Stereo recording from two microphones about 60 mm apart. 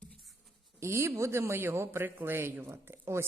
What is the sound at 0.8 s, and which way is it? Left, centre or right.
A man's voice, right.